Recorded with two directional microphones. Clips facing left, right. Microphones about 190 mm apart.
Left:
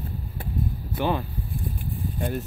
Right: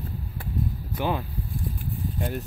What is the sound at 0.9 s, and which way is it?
Speech, 10° right (ahead or behind).